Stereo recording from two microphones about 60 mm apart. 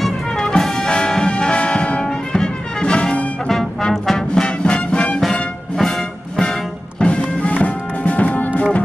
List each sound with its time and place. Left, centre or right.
0.0 s brass instrument: centre
4.6 s music: centre
5.2 s music: centre
7.0 s music: left